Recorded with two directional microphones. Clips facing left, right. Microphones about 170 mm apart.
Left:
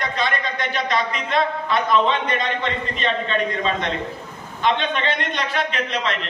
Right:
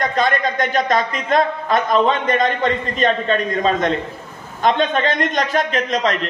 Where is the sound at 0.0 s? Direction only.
45° right (ahead or behind).